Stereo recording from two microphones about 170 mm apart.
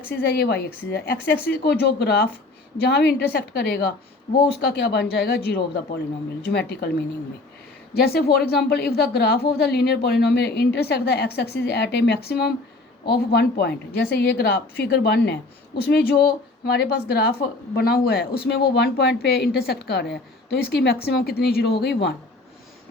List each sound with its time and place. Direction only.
0.2 s a woman's voice: 65° left (ahead or behind)
7.9 s speech: 65° left (ahead or behind); by 15.4 s 85° left
15.8 s a woman's voice: 70° left (ahead or behind)